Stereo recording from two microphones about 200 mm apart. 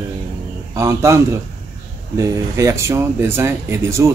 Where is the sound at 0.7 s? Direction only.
15° right (ahead or behind).